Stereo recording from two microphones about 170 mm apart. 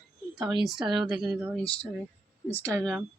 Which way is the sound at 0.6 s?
Centre (ahead or behind).